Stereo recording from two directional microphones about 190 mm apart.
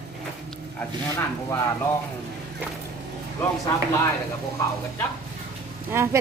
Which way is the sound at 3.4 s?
15° left (ahead or behind).